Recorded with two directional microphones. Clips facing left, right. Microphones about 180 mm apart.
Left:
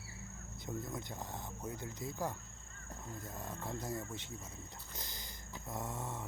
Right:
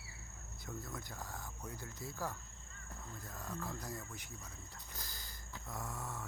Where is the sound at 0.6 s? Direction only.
20° left (ahead or behind).